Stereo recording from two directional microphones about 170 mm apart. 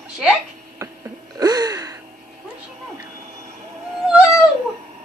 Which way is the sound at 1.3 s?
20° right (ahead or behind).